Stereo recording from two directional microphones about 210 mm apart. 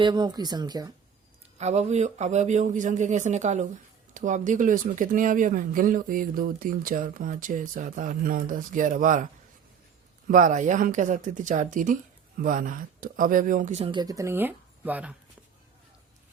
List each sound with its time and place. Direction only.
0.0 s speech: 20° right (ahead or behind)
1.5 s speech: 30° right (ahead or behind)
10.2 s speech: 40° right (ahead or behind); by 15.1 s 5° right (ahead or behind)